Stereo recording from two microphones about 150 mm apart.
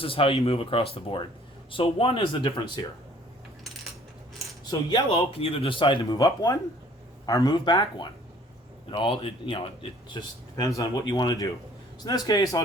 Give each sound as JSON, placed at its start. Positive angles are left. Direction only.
{"t": 0.0, "sound": "speech", "side_deg": 35}
{"t": 4.7, "sound": "speech", "side_deg": 30}